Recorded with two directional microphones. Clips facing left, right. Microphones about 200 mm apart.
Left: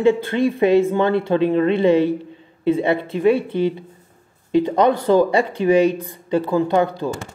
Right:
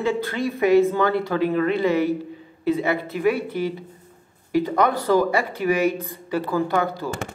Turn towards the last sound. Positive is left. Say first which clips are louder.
# left 5 dB
turn(degrees=20)  # may be behind; listen again after turning